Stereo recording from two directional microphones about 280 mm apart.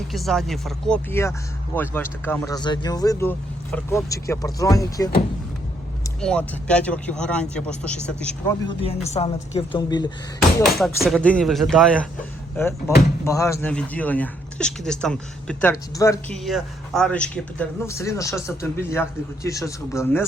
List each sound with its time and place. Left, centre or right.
0.1 s speech: centre
6.1 s speech: centre
8.8 s speech: left
10.6 s speech: centre
13.2 s speech: centre